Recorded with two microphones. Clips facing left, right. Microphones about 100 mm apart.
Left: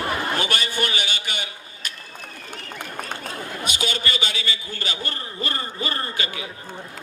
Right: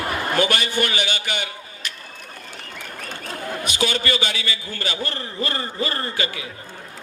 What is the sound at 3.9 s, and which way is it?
Speech, 30° left (ahead or behind).